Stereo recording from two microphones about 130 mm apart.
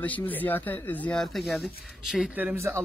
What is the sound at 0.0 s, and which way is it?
Speech, 10° left (ahead or behind).